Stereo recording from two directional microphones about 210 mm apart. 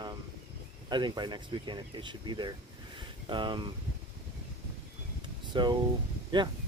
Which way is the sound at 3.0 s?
20° right (ahead or behind).